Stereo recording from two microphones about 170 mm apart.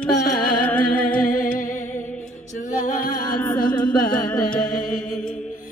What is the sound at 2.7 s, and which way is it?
Music, 50° left (ahead or behind).